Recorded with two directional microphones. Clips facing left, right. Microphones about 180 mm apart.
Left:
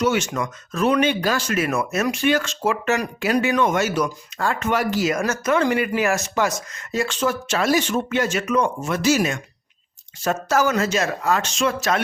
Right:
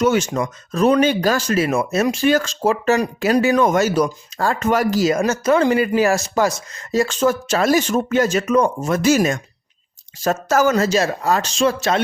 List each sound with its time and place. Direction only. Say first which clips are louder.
0.0 s speech: right 4 dB; 40° right (ahead or behind)